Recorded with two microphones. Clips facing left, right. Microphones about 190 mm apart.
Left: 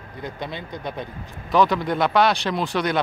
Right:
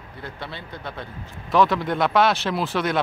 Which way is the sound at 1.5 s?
Centre (ahead or behind).